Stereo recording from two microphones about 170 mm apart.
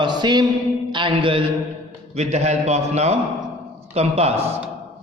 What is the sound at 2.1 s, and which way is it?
A man's voice, 40° right (ahead or behind).